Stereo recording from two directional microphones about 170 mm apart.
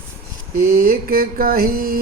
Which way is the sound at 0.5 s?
65° right (ahead or behind).